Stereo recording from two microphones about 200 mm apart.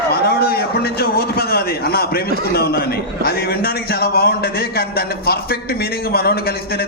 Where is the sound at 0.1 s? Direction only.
50° left (ahead or behind).